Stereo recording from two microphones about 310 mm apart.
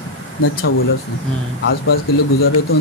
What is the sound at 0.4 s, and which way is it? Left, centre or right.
Speech, left.